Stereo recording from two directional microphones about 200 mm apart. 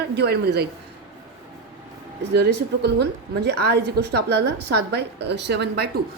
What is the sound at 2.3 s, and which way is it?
A woman's voice, 55° right (ahead or behind).